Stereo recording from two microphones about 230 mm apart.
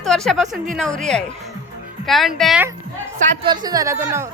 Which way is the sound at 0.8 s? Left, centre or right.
Centre.